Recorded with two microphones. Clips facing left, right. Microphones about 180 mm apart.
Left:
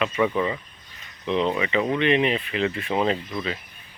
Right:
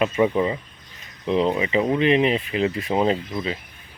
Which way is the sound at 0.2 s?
25° right (ahead or behind).